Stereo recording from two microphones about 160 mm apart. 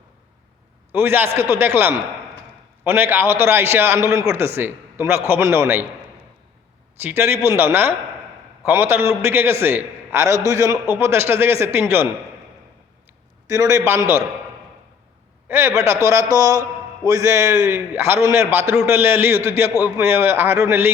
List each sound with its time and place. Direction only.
0.9 s a man's voice: 15° right (ahead or behind)
7.0 s a man's voice: 15° right (ahead or behind)
13.5 s a man's voice: 20° right (ahead or behind)
15.4 s a man's voice: 15° right (ahead or behind)